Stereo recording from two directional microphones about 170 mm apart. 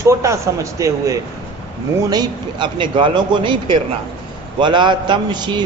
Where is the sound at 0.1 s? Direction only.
15° right (ahead or behind).